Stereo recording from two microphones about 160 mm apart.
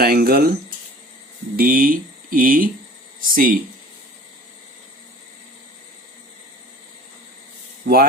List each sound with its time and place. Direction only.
0.0 s speech: 70° right (ahead or behind)
1.5 s speech: 60° right (ahead or behind)
7.9 s speech: 60° right (ahead or behind)